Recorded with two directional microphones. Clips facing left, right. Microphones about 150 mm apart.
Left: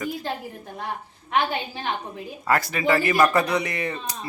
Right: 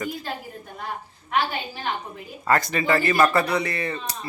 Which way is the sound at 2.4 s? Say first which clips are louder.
Right 1 dB; 5° left (ahead or behind).